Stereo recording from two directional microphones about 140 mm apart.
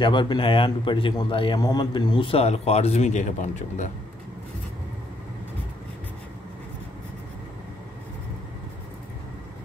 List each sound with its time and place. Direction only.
0.0 s speech: 35° left (ahead or behind); by 3.9 s 65° left (ahead or behind)